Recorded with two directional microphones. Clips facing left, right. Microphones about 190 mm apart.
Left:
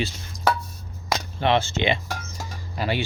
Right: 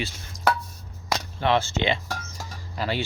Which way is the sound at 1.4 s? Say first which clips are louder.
Left 1 dB; 20° left (ahead or behind).